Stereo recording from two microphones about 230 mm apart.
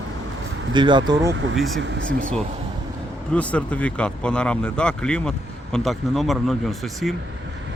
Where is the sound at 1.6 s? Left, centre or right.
Centre.